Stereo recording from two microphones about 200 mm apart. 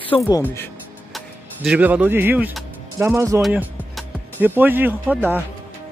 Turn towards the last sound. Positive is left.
turn(degrees=-10)  # may be behind; listen again after turning